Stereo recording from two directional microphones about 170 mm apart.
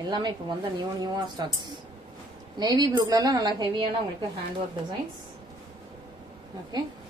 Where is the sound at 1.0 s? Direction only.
25° right (ahead or behind).